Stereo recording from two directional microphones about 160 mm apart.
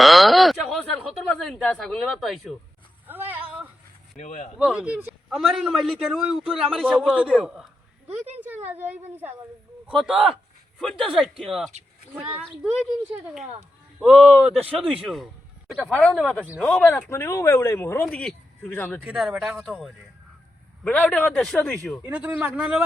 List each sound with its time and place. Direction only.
0.0 s speech: centre (ahead or behind)
3.1 s a sound: 10° right (ahead or behind)
4.2 s speech: 50° left (ahead or behind)
4.5 s a man's voice: 5° right (ahead or behind)
8.4 s a woman's voice: 10° right (ahead or behind)
10.0 s a man's voice: centre (ahead or behind)
17.1 s speech: 15° left (ahead or behind)
19.0 s a man's voice: 5° right (ahead or behind)
22.0 s a woman's voice: 10° right (ahead or behind)